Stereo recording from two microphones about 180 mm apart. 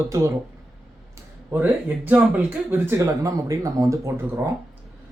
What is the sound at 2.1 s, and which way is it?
A man's voice, 10° right (ahead or behind).